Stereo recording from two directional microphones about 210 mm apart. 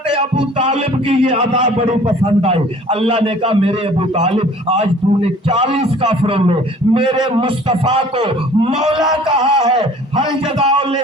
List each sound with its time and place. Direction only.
0.2 s music: 25° right (ahead or behind)
9.0 s a sound: centre (ahead or behind)
9.6 s music: 20° right (ahead or behind)